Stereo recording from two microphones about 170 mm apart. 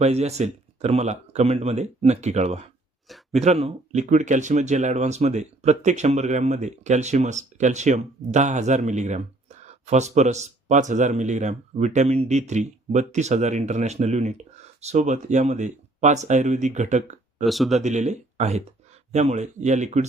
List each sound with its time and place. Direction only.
0.0 s speech: 40° right (ahead or behind)
3.1 s a sound: centre (ahead or behind)
3.4 s speech: 40° right (ahead or behind)
17.4 s speech: centre (ahead or behind)
17.7 s speech: 40° right (ahead or behind)